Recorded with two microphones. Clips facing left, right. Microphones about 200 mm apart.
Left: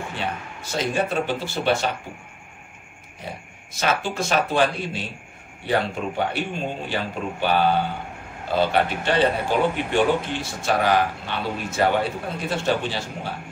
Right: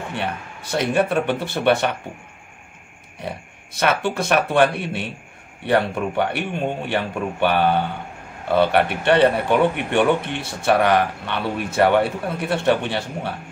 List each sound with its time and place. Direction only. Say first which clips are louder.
0.1 s a man's voice: right 2 dB; 65° right (ahead or behind)
3.2 s a man's voice: right 5 dB; 65° right (ahead or behind)